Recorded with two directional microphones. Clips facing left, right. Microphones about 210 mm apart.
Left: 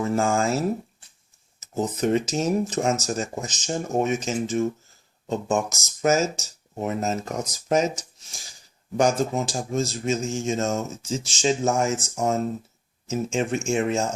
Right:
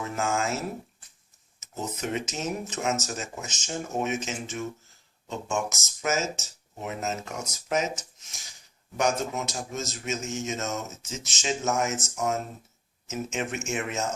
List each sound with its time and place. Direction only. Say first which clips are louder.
0.1 s speech: left 4 dB; 35° left (ahead or behind)
1.6 s speech: left 9 dB; 35° left (ahead or behind)